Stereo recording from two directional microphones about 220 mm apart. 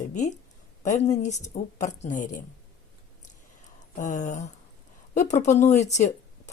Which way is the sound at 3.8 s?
35° left (ahead or behind).